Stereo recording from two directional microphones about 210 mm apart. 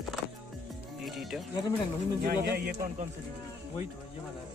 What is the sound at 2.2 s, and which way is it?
Speech, 45° right (ahead or behind).